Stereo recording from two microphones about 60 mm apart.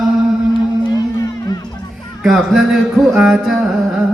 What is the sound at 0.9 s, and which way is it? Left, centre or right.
Music, left.